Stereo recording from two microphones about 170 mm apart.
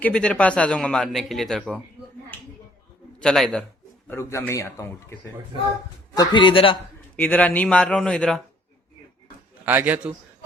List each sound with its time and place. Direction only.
0.0 s a man's voice: 5° left (ahead or behind)
3.2 s a man's voice: 5° left (ahead or behind)
4.1 s speech: 15° left (ahead or behind)
6.1 s a man's voice: 30° left (ahead or behind)
7.2 s speech: 10° left (ahead or behind)
9.6 s a man's voice: 10° right (ahead or behind)